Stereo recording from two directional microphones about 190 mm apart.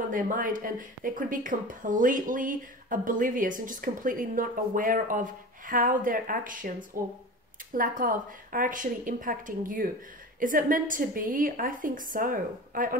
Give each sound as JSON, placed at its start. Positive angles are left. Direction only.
{"t": 0.1, "sound": "speech", "side_deg": -45}